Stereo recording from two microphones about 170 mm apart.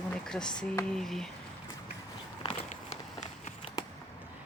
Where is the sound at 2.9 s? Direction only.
45° left (ahead or behind).